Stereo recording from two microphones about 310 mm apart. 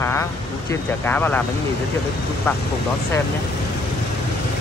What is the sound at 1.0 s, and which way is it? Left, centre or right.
Speech, centre.